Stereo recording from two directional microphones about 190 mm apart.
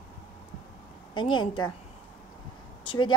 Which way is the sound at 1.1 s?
25° left (ahead or behind).